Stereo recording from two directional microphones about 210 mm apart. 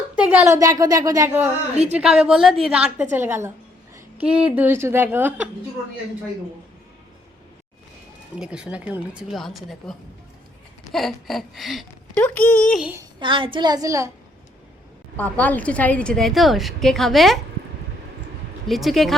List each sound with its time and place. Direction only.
0.2 s a woman's voice: 10° right (ahead or behind)
8.4 s a woman's voice: 5° right (ahead or behind)
12.9 s a woman's voice: 20° right (ahead or behind)
15.1 s a woman's voice: 10° left (ahead or behind)
18.7 s a woman's voice: centre (ahead or behind)